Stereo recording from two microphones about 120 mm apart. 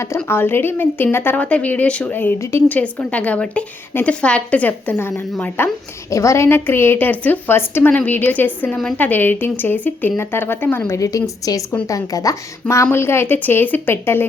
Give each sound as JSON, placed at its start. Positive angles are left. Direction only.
{"t": 0.3, "sound": "a woman's voice", "side_deg": 20}